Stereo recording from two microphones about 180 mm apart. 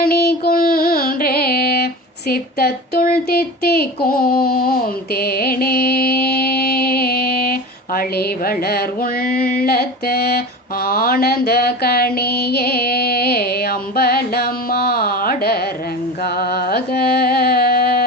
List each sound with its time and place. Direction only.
0.0 s music: 60° left (ahead or behind)
10.8 s a sound: 55° left (ahead or behind)
16.2 s music: 60° left (ahead or behind)